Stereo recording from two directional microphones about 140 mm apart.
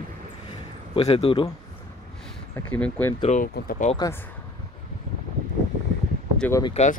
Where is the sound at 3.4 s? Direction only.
85° left.